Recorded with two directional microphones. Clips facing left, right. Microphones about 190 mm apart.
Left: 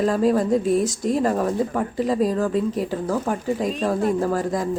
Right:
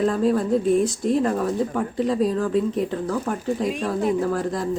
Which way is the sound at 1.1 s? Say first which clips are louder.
Left 1 dB; 5° left (ahead or behind).